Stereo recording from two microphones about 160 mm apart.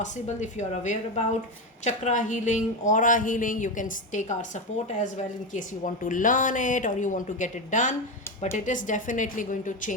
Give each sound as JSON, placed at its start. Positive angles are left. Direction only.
{"t": 0.0, "sound": "a woman's voice", "side_deg": 50}